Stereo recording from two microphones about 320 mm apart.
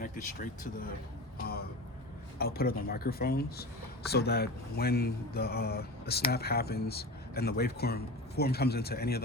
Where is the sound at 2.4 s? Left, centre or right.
Left.